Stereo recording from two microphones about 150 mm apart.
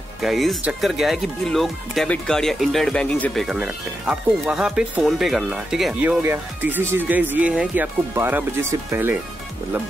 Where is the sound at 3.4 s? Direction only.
5° right (ahead or behind).